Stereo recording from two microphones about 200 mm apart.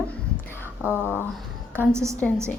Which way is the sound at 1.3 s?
Centre (ahead or behind).